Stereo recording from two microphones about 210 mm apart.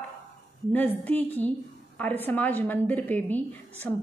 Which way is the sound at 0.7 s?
10° left (ahead or behind).